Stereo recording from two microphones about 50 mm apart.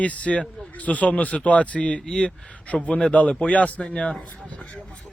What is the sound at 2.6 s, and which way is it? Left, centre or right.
Speech, left.